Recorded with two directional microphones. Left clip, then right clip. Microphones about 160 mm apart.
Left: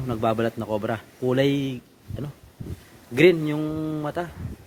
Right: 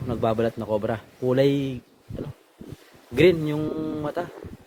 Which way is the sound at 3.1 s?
10° right (ahead or behind).